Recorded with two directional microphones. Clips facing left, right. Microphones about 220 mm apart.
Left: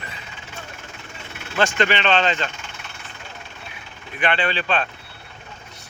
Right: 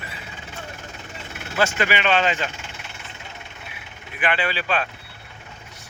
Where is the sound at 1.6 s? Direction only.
10° right (ahead or behind).